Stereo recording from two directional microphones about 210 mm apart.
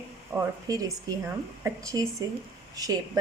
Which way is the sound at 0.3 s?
15° right (ahead or behind).